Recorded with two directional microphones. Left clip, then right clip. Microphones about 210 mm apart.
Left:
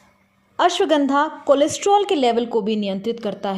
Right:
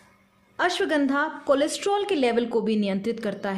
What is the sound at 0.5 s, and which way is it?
A woman's voice, 15° left (ahead or behind).